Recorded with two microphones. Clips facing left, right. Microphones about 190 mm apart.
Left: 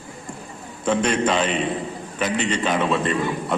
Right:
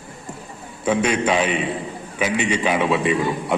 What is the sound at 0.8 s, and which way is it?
A man's voice, 10° right (ahead or behind).